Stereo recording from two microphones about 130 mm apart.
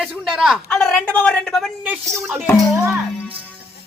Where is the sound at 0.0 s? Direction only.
5° right (ahead or behind).